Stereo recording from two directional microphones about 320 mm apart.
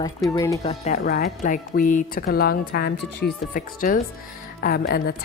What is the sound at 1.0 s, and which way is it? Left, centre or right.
A woman's voice, left.